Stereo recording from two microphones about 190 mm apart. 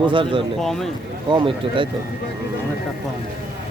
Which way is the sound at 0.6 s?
Centre (ahead or behind).